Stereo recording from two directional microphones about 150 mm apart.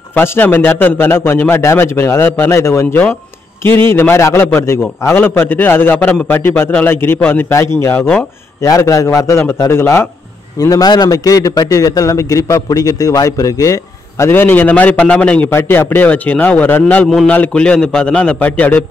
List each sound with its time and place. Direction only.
0.1 s a man's voice: 15° left (ahead or behind)